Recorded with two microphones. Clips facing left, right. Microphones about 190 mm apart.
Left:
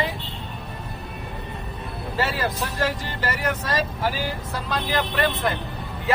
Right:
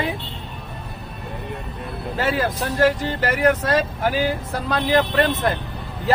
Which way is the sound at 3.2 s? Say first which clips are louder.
Right 8 dB; 50° right (ahead or behind).